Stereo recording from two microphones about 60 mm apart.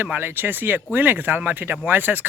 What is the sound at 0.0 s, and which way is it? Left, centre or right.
Speech, right.